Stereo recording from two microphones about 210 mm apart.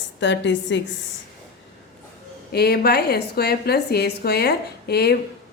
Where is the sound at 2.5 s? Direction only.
50° left (ahead or behind).